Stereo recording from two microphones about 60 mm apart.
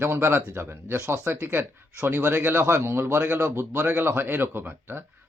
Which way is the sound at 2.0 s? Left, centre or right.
Right.